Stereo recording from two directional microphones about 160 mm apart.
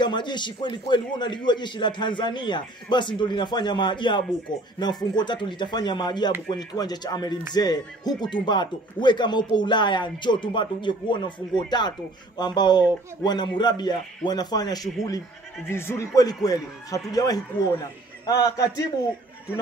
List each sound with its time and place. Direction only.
0.0 s speech: 30° left (ahead or behind)